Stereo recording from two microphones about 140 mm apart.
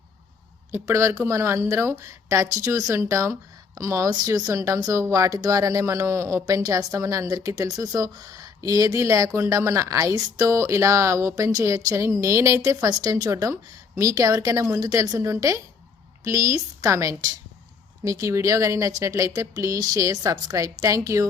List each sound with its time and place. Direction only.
0.7 s speech: 20° right (ahead or behind)